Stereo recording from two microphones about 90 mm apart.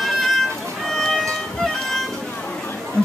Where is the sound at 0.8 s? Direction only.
Centre (ahead or behind).